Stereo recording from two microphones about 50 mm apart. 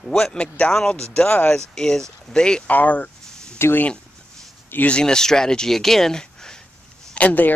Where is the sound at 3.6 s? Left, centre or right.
Left.